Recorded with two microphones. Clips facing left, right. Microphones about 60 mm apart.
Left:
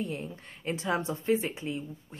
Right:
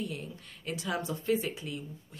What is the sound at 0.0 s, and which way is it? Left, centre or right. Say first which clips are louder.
Speech: left 3 dB; left.